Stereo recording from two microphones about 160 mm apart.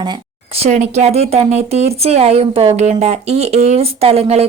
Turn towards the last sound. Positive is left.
turn(degrees=-40)  # may be behind; listen again after turning